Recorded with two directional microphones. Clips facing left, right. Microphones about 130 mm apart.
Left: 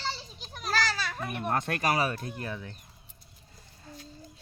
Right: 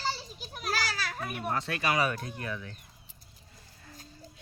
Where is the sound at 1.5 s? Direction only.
50° left (ahead or behind).